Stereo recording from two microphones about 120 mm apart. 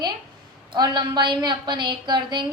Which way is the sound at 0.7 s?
40° right (ahead or behind).